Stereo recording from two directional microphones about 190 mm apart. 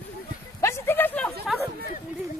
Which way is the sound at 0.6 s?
10° left (ahead or behind).